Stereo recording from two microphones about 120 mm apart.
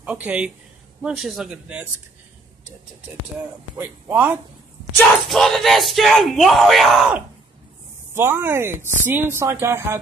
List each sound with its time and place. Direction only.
0.0 s a man's voice: 10° right (ahead or behind)
1.0 s yell: centre (ahead or behind)
3.7 s a man's voice: 15° right (ahead or behind)
5.3 s yell: centre (ahead or behind)
8.1 s speech: 20° right (ahead or behind)